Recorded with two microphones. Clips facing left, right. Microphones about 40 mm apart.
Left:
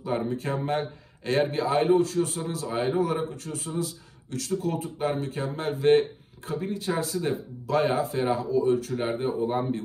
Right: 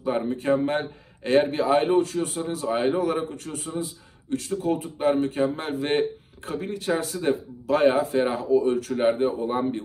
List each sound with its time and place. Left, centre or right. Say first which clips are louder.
0.0 s speech: right 3 dB; right
4.3 s speech: right 3 dB; right
8.9 s speech: right 5 dB; right